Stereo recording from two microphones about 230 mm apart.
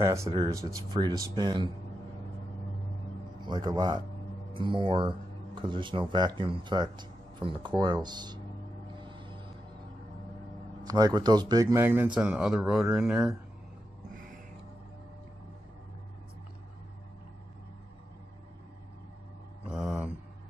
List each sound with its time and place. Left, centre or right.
0.0 s speech: centre
3.3 s speech: centre
8.9 s music: right
10.9 s speech: centre
14.1 s music: right
19.7 s a sound: centre